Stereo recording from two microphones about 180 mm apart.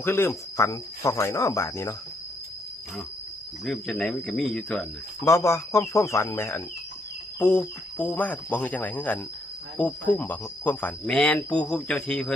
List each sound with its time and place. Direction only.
0.0 s speech: 10° left (ahead or behind)
3.6 s speech: centre (ahead or behind)
5.2 s speech: 15° left (ahead or behind)